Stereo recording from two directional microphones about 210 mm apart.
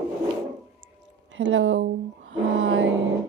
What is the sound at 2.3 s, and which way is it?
Music, 65° right (ahead or behind).